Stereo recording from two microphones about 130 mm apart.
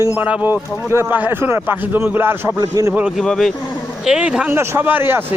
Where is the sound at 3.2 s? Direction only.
5° left (ahead or behind); by 5.2 s 15° right (ahead or behind).